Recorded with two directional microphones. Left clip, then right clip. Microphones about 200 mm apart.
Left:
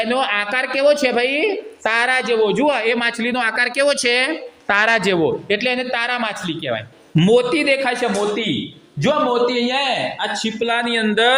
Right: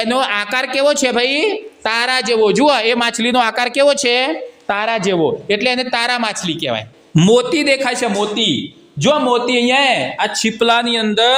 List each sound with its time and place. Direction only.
0.0 s a woman's voice: 30° right (ahead or behind)
2.2 s a woman's voice: 35° right (ahead or behind)
4.7 s a man's voice: 10° right (ahead or behind)
5.5 s a woman's voice: 30° right (ahead or behind)
10.8 s speech: 25° right (ahead or behind)